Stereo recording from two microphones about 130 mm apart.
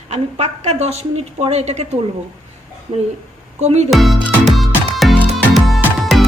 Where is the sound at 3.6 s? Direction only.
60° right (ahead or behind).